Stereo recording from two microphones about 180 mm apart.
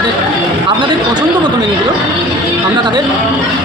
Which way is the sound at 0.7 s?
25° right (ahead or behind).